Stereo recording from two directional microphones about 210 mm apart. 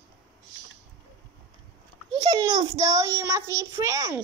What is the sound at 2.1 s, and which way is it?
A child's voice, 20° right (ahead or behind).